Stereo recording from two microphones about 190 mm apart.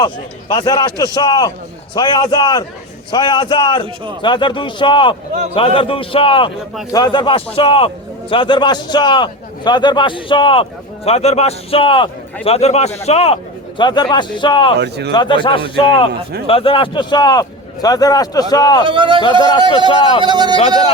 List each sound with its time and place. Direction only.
0.0 s a man's voice: 20° left (ahead or behind)
14.8 s speech: 60° right (ahead or behind)
15.1 s a man's voice: 25° left (ahead or behind)
18.9 s speech: 25° right (ahead or behind)
19.9 s a man's voice: 25° left (ahead or behind)
20.2 s speech: 20° right (ahead or behind)
20.6 s speech: 30° left (ahead or behind)